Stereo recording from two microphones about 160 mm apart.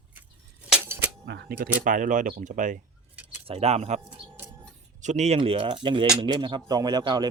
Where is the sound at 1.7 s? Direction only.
55° right (ahead or behind).